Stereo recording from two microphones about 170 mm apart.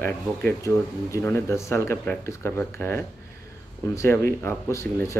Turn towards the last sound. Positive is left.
turn(degrees=15)  # may be behind; listen again after turning